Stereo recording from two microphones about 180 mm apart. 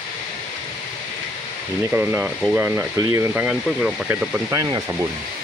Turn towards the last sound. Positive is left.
turn(degrees=-15)  # may be behind; listen again after turning